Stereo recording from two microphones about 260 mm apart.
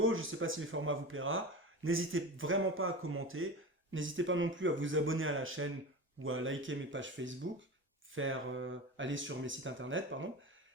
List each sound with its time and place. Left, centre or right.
0.0 s speech: right